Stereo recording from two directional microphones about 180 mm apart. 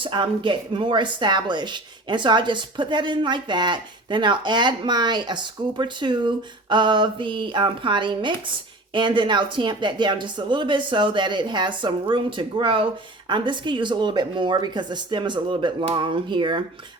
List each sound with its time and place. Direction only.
0.0 s a woman's voice: 25° right (ahead or behind)